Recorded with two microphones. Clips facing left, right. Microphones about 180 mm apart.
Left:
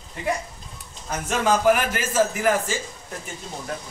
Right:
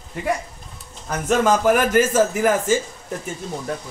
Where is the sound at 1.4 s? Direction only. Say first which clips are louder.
Right 1 dB; 45° right (ahead or behind).